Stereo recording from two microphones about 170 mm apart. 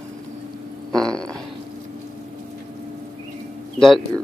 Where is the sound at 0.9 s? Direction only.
5° left (ahead or behind).